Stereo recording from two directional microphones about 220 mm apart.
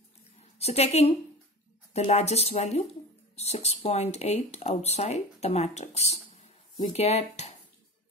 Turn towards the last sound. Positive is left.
turn(degrees=30)  # may be behind; listen again after turning